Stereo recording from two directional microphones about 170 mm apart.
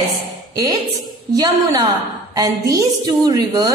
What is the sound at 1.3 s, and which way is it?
A woman's voice, 20° right (ahead or behind).